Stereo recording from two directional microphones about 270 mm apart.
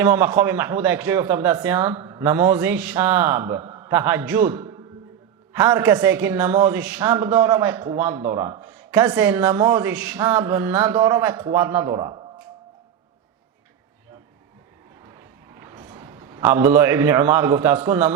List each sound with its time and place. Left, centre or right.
0.0 s a woman's voice: centre
15.6 s a man's voice: centre